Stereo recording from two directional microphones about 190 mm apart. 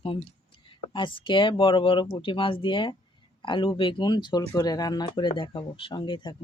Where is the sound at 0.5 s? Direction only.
25° left (ahead or behind).